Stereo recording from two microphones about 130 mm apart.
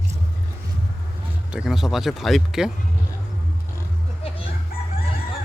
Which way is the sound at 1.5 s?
5° right (ahead or behind).